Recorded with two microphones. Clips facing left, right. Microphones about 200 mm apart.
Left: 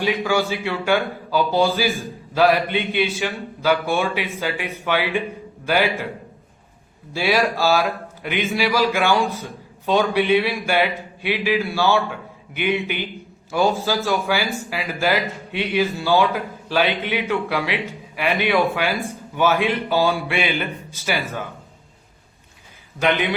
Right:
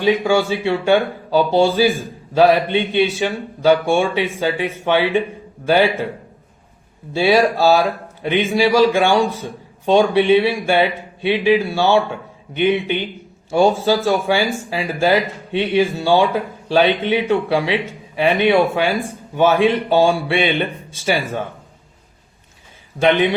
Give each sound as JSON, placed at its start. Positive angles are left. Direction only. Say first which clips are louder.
{"t": 0.3, "sound": "speech", "louder": "right 5 dB", "side_deg": -25}
{"t": 7.1, "sound": "speech", "louder": "right 6 dB", "side_deg": -25}
{"t": 23.0, "sound": "speech", "louder": "right 5 dB", "side_deg": -30}